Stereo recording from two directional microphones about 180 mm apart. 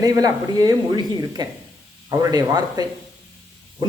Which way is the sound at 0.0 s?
20° right (ahead or behind).